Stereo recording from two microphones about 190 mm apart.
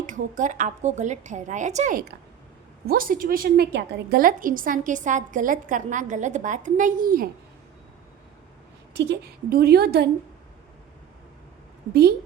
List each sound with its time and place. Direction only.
0.0 s a woman's voice: 40° right (ahead or behind)
9.0 s a woman's voice: 55° right (ahead or behind)